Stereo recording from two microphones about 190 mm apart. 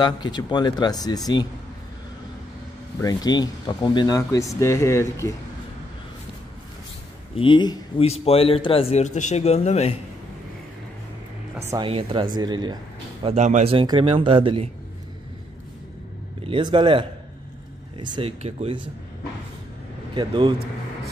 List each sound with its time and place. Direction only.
0.0 s speech: 20° left (ahead or behind)
3.0 s speech: 20° left (ahead or behind)
7.3 s a man's voice: 25° left (ahead or behind)
11.8 s speech: 25° right (ahead or behind)
13.2 s speech: 35° right (ahead or behind)
16.4 s speech: 25° right (ahead or behind)
20.2 s speech: 25° right (ahead or behind)